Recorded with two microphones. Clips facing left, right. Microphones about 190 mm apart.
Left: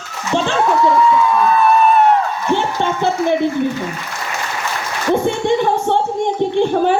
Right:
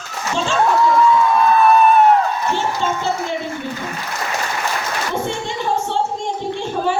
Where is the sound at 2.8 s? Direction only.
60° left (ahead or behind).